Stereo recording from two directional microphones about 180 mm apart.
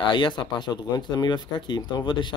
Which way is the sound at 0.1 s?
25° left (ahead or behind).